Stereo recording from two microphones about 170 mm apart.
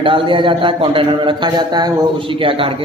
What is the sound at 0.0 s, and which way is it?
A man's voice, 30° right (ahead or behind).